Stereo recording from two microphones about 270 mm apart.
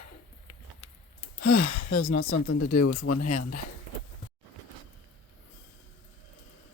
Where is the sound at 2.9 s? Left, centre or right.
Left.